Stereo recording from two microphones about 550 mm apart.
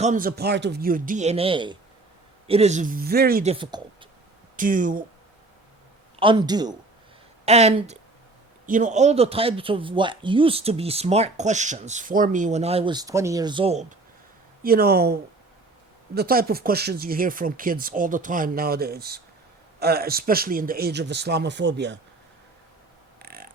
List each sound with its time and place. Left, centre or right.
0.0 s speech: centre
6.1 s speech: centre
23.2 s a sound: centre